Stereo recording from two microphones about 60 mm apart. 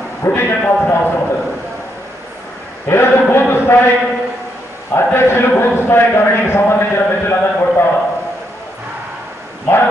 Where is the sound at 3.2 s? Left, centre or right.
Left.